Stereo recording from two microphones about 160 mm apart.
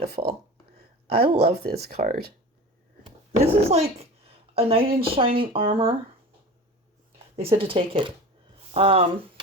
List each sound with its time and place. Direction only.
0.0 s speech: 80° right
3.4 s speech: 40° right (ahead or behind)
7.3 s speech: 35° right (ahead or behind)